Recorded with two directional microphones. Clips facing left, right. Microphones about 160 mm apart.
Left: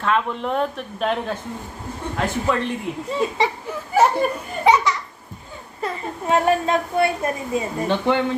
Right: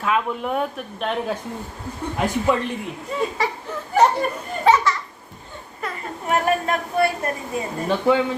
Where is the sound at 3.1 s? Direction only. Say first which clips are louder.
Left 1 dB; 30° left (ahead or behind).